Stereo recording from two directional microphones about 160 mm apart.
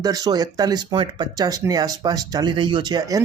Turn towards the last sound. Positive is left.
turn(degrees=-25)  # may be behind; listen again after turning